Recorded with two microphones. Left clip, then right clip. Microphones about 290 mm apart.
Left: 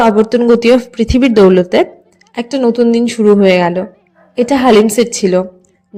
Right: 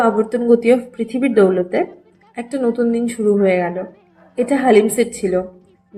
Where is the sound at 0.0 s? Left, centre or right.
Left.